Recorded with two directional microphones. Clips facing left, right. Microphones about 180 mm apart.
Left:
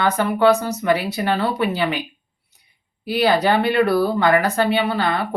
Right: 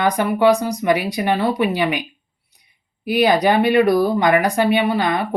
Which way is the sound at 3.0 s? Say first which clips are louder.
Right 2 dB; 15° right (ahead or behind).